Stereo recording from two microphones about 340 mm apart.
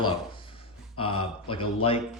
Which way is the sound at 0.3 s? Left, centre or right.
Centre.